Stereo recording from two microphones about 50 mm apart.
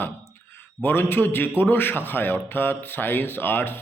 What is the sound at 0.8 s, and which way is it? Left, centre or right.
A man's voice, left.